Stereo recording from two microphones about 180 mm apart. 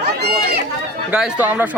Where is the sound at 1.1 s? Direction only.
5° right (ahead or behind).